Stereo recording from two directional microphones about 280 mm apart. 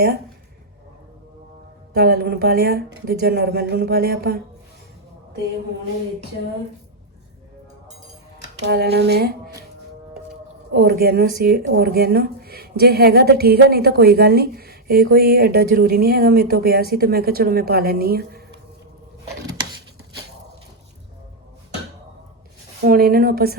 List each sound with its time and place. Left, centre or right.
1.9 s a woman's voice: right
8.4 s speech: right
10.8 s a woman's voice: right
22.8 s a woman's voice: right